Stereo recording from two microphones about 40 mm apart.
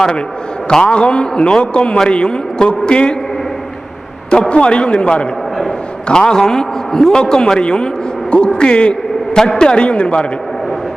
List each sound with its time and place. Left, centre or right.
0.7 s a man's voice: left
4.4 s a man's voice: left